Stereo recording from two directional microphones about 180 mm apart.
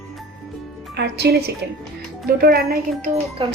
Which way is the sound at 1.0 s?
65° right (ahead or behind).